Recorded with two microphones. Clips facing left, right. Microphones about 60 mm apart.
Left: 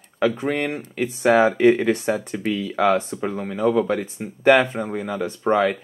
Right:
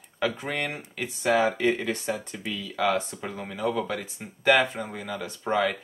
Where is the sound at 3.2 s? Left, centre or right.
Centre.